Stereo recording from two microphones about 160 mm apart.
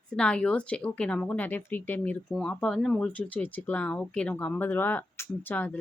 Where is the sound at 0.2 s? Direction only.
5° left (ahead or behind).